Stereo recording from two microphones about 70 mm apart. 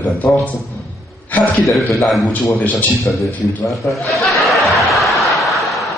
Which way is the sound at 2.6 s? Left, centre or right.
Left.